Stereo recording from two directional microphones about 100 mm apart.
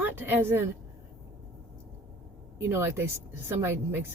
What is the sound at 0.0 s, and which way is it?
Speech, 20° right (ahead or behind).